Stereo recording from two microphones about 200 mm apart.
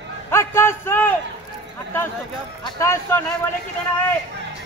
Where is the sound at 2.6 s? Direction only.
15° left (ahead or behind).